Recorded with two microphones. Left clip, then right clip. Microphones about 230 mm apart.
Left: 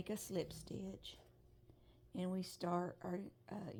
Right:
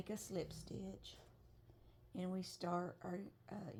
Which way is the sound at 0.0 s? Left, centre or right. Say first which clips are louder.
Left 2 dB; left.